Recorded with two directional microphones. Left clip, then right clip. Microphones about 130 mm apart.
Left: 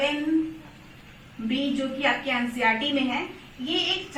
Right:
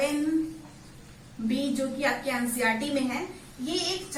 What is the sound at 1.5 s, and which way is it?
A woman's voice, centre (ahead or behind).